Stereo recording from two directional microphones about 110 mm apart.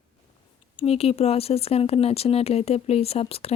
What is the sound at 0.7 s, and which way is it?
Speech, 65° left (ahead or behind).